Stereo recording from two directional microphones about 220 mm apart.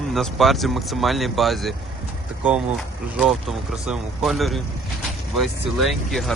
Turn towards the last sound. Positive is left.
turn(degrees=0)  # may be behind; listen again after turning